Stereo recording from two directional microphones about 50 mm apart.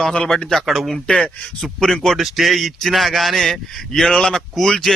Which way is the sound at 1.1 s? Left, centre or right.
Left.